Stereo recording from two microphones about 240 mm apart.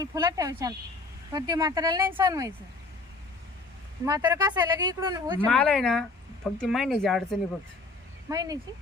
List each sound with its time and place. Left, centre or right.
0.0 s speech: centre
4.0 s speech: centre
5.5 s speech: centre
8.3 s speech: centre